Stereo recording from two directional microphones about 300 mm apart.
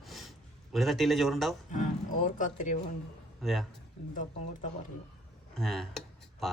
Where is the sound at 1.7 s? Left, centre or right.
Left.